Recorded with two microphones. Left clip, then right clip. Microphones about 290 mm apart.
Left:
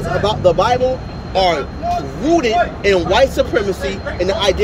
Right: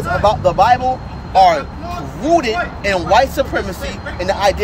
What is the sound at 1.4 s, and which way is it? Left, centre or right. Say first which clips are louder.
Speech: right 4 dB; centre.